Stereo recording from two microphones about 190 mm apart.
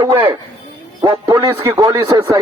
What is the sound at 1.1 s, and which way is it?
A man's voice, 25° right (ahead or behind).